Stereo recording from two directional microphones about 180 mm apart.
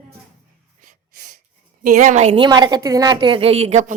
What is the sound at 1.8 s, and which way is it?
Speech, 45° right (ahead or behind).